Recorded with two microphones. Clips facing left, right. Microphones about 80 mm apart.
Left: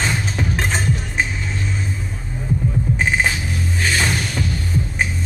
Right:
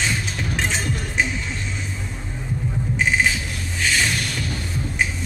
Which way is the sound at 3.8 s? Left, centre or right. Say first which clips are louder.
Left 1 dB; left.